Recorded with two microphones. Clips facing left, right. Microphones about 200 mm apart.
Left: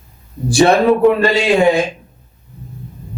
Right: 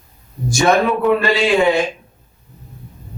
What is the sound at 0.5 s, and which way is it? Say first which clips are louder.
Speech: left 4 dB; 35° left (ahead or behind).